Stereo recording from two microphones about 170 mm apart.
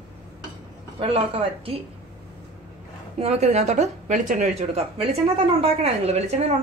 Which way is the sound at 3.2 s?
40° right (ahead or behind).